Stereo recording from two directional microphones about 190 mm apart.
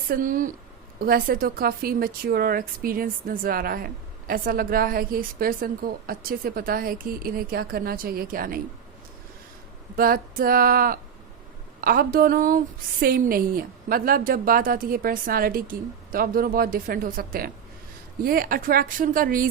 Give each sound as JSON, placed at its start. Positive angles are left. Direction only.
{"t": 0.1, "sound": "a woman's voice", "side_deg": -45}
{"t": 9.9, "sound": "a woman's voice", "side_deg": -50}